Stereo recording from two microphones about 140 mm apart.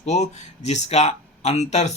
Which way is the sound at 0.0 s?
55° left (ahead or behind).